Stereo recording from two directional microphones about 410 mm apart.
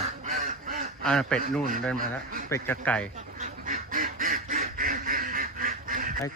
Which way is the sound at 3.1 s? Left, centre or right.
Centre.